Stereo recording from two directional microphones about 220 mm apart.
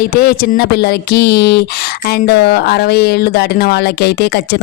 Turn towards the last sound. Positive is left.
turn(degrees=45)  # may be behind; listen again after turning